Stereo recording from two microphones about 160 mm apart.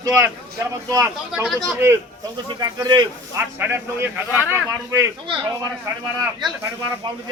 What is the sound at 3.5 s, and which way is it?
Speech, 10° right (ahead or behind).